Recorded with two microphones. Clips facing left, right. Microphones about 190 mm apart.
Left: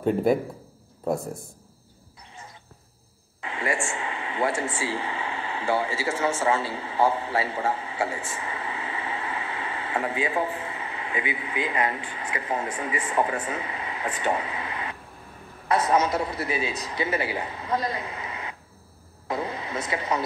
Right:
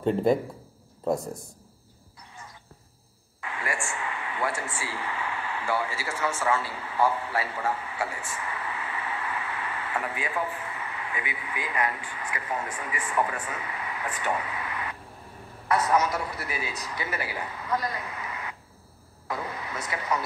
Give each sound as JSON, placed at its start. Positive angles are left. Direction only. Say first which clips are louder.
{"t": 0.0, "sound": "a man's voice", "louder": "left 1 dB", "side_deg": 10}
{"t": 3.3, "sound": "a man's voice", "louder": "left 5 dB", "side_deg": 25}